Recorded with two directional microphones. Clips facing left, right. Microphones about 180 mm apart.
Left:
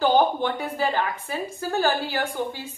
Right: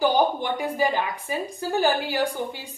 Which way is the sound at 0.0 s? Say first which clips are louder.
Left 1 dB; 15° right (ahead or behind).